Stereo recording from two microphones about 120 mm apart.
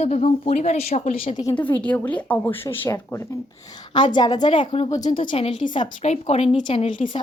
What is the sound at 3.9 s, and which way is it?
Speech, 40° left (ahead or behind).